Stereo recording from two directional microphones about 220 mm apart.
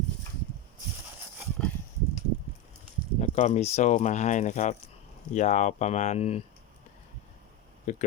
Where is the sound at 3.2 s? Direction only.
30° left (ahead or behind).